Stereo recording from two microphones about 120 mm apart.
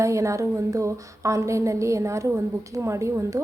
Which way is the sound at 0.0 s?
25° right (ahead or behind).